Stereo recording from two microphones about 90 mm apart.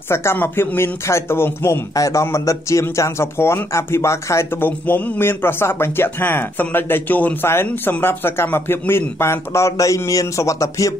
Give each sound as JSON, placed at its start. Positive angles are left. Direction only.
{"t": 0.1, "sound": "speech", "side_deg": 30}